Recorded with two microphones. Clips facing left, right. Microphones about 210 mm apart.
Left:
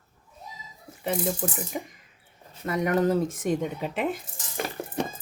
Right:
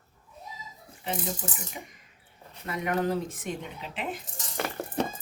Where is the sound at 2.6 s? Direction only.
45° left (ahead or behind).